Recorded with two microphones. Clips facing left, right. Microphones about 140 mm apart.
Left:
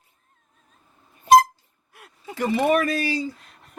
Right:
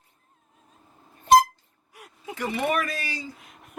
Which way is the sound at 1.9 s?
Centre (ahead or behind).